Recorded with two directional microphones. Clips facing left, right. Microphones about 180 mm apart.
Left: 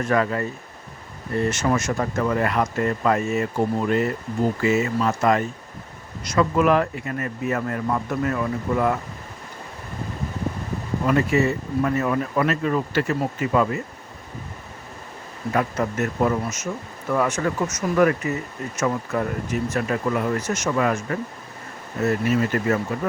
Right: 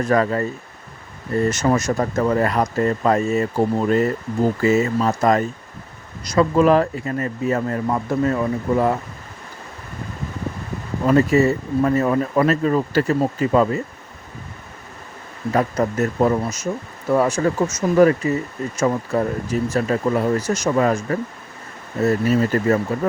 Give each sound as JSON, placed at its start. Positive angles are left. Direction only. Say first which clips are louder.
{"t": 0.0, "sound": "speech", "louder": "right 3 dB", "side_deg": -35}
{"t": 1.5, "sound": "speech", "louder": "right 4 dB", "side_deg": -40}
{"t": 11.0, "sound": "speech", "louder": "right 5 dB", "side_deg": -35}
{"t": 15.5, "sound": "speech", "louder": "right 4 dB", "side_deg": -35}